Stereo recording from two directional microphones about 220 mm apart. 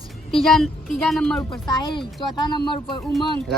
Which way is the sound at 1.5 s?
20° left (ahead or behind).